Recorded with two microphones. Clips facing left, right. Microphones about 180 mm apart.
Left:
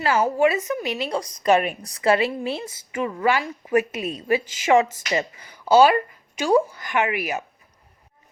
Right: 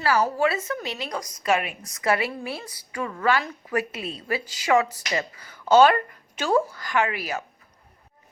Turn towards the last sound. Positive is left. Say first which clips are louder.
# left 2 dB
turn(degrees=15)  # may be behind; listen again after turning